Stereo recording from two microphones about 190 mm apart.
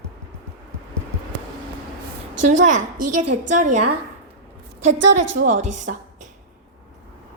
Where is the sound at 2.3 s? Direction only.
40° right (ahead or behind).